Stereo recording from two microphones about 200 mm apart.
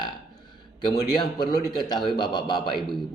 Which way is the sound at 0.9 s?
20° left (ahead or behind).